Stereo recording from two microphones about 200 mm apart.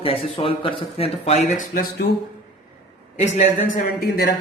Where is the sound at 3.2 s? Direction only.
35° left (ahead or behind).